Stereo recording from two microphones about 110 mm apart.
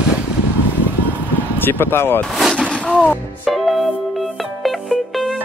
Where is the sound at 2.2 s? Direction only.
Centre (ahead or behind).